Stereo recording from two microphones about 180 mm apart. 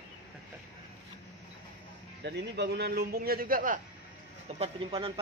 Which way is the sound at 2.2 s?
70° right (ahead or behind).